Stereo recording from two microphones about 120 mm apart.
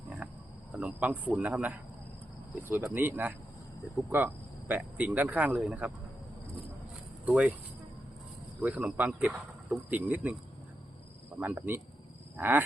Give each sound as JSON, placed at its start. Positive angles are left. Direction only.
{"t": 0.2, "sound": "a sound", "side_deg": -10}
{"t": 0.7, "sound": "speech", "side_deg": -15}
{"t": 4.7, "sound": "speech", "side_deg": -10}
{"t": 7.3, "sound": "speech", "side_deg": -10}
{"t": 8.6, "sound": "speech", "side_deg": -10}
{"t": 11.3, "sound": "speech", "side_deg": -15}